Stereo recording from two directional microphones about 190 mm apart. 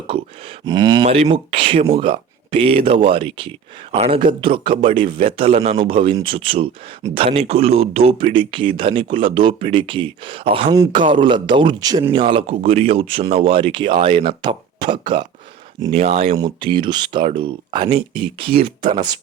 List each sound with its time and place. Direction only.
0.1 s grunt: 30° right (ahead or behind)
0.6 s speech: 20° right (ahead or behind)
1.0 s speech: 35° right (ahead or behind)
15.9 s speech: 35° right (ahead or behind)